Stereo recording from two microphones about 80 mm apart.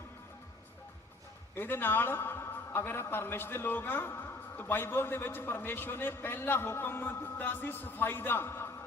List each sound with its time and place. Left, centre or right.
1.5 s a man's voice: left